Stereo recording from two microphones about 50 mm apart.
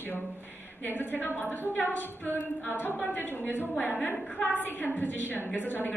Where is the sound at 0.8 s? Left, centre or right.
Left.